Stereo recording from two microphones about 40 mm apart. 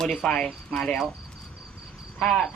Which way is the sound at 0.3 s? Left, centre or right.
Left.